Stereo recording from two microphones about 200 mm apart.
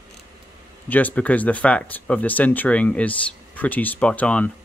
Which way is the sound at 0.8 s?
10° left (ahead or behind).